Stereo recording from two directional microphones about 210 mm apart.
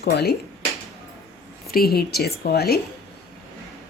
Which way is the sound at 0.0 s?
50° left (ahead or behind).